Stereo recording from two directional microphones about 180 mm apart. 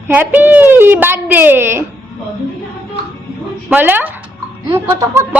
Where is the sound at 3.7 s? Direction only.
10° right (ahead or behind).